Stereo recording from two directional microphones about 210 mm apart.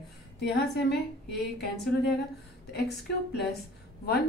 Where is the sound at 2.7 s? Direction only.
50° left (ahead or behind).